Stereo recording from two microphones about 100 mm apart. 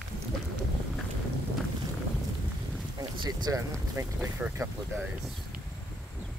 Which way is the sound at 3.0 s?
40° right (ahead or behind).